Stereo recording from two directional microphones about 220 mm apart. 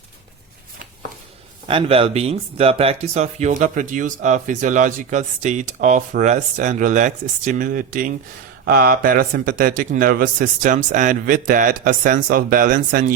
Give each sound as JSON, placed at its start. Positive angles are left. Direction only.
{"t": 1.6, "sound": "speech", "side_deg": -25}